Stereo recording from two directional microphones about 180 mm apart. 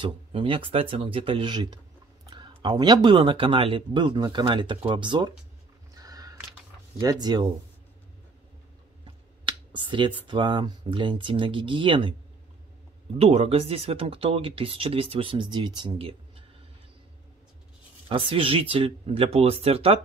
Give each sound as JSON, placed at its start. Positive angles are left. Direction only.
{"t": 0.0, "sound": "speech", "side_deg": -30}
{"t": 5.9, "sound": "a sound", "side_deg": -20}
{"t": 7.0, "sound": "speech", "side_deg": -20}
{"t": 9.0, "sound": "speech", "side_deg": -25}
{"t": 13.2, "sound": "speech", "side_deg": -35}
{"t": 18.0, "sound": "speech", "side_deg": -30}